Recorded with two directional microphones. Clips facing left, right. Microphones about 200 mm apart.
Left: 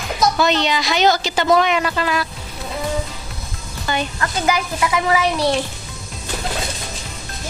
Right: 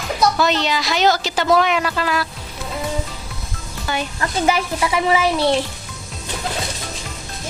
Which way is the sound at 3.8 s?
5° right (ahead or behind).